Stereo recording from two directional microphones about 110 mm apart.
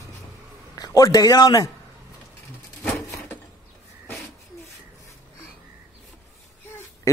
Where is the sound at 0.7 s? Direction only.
35° left (ahead or behind).